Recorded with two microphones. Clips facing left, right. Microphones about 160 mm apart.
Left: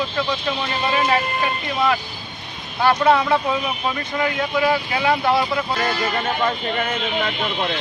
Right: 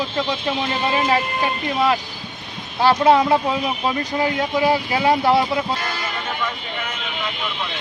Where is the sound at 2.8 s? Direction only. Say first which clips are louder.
Right 2 dB; 30° right (ahead or behind).